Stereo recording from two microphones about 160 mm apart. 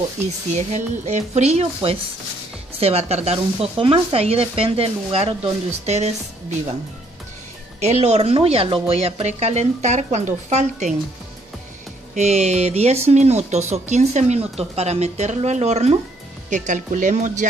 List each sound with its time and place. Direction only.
0.5 s speech: 45° right (ahead or behind)
7.8 s speech: 40° right (ahead or behind)
12.2 s speech: 45° right (ahead or behind)